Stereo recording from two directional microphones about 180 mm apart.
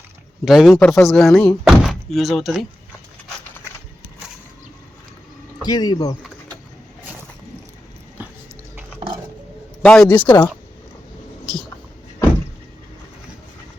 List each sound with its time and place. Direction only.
0.4 s speech: centre (ahead or behind)
5.6 s speech: 20° left (ahead or behind)
8.2 s dog: 10° right (ahead or behind)
9.8 s speech: 5° left (ahead or behind)